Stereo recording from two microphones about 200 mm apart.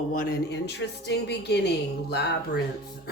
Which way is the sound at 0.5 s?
60° left (ahead or behind).